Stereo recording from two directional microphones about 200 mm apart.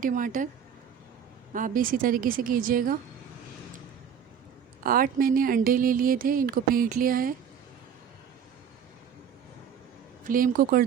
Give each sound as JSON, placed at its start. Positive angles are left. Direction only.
{"t": 0.0, "sound": "speech", "side_deg": -40}
{"t": 1.5, "sound": "speech", "side_deg": -45}
{"t": 4.8, "sound": "speech", "side_deg": -45}
{"t": 10.2, "sound": "speech", "side_deg": -45}